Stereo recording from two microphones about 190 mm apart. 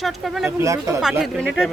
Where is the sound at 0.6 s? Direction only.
15° right (ahead or behind).